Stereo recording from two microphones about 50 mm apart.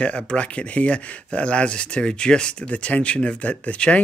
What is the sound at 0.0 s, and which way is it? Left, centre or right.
Speech, left.